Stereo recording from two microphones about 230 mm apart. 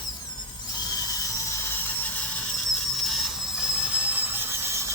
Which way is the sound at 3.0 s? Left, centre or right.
Centre.